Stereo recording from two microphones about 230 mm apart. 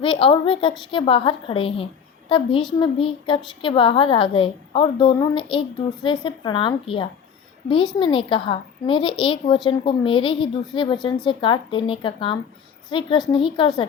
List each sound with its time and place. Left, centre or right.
0.0 s a woman's voice: left